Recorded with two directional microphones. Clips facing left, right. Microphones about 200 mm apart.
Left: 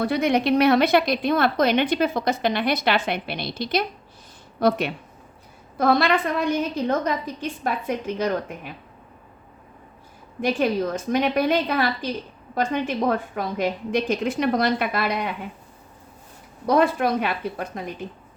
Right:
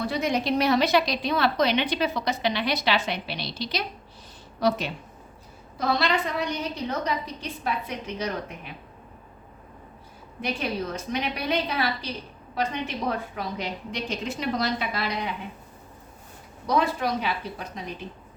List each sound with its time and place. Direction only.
0.0 s a woman's voice: 60° left (ahead or behind)
10.4 s a woman's voice: 50° left (ahead or behind)
16.6 s a woman's voice: 55° left (ahead or behind)